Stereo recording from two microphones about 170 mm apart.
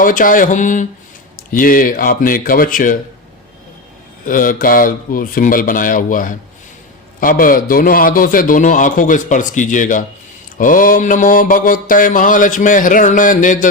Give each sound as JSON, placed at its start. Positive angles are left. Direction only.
{"t": 0.0, "sound": "mantra", "side_deg": 55}
{"t": 1.5, "sound": "speech", "side_deg": 55}
{"t": 4.3, "sound": "mantra", "side_deg": 55}